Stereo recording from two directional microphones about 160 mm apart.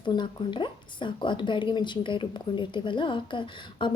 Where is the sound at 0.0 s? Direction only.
30° left (ahead or behind).